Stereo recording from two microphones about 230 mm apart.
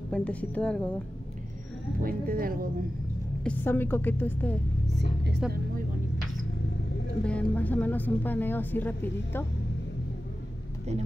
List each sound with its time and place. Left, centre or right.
0.1 s a woman's voice: centre
2.0 s speech: right
3.4 s speech: centre
4.8 s speech: right
7.2 s speech: centre